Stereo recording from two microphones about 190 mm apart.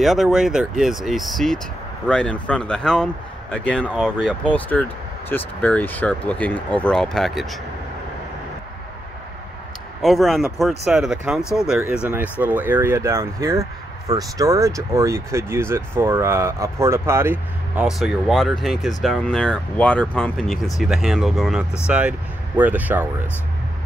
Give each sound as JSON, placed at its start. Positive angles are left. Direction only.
{"t": 0.0, "sound": "speech", "side_deg": 0}
{"t": 10.0, "sound": "speech", "side_deg": 0}